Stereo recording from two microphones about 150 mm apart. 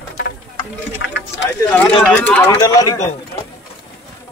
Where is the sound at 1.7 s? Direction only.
10° left (ahead or behind).